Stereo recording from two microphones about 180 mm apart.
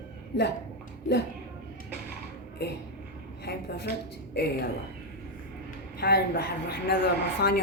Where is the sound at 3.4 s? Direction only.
65° left (ahead or behind).